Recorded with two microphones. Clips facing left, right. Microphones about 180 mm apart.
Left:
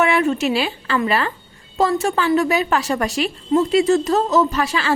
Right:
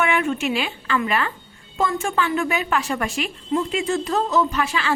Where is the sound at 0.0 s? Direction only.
35° left (ahead or behind).